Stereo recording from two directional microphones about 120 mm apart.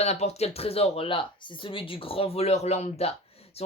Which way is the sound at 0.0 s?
60° left (ahead or behind).